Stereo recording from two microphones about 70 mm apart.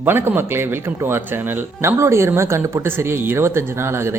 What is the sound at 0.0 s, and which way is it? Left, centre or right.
A man's voice, right.